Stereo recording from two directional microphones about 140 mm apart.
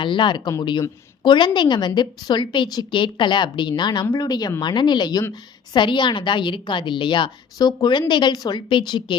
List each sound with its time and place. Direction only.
0.0 s a woman's voice: 35° left (ahead or behind)